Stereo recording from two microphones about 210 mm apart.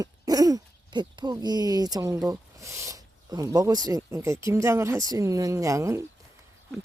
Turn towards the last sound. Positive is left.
turn(degrees=-15)  # may be behind; listen again after turning